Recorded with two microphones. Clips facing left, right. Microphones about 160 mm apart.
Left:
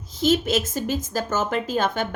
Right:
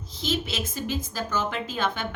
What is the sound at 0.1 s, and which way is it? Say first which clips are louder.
A woman's voice: left 9 dB; 45° left (ahead or behind).